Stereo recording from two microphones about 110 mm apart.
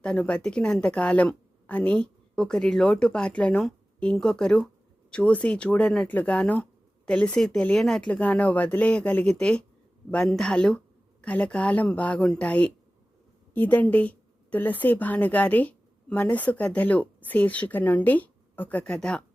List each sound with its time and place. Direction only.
0.0 s a woman's voice: 10° left (ahead or behind)